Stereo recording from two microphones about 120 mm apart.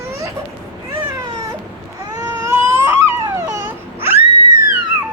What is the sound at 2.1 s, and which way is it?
Baby cry, 25° right (ahead or behind).